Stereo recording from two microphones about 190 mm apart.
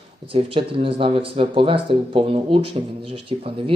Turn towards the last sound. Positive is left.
turn(degrees=-30)  # may be behind; listen again after turning